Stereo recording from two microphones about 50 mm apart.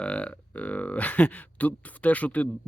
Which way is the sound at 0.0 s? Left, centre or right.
Left.